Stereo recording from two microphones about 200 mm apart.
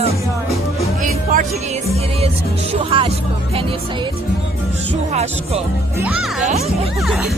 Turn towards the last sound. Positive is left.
turn(degrees=-5)  # may be behind; listen again after turning